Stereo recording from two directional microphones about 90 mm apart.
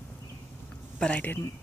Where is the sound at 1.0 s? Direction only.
20° left (ahead or behind).